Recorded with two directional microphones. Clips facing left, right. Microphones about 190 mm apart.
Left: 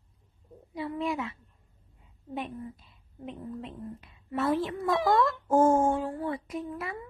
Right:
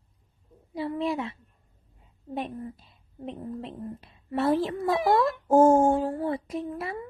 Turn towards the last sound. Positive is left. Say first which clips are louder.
# right 3 dB
turn(degrees=-30)  # may be behind; listen again after turning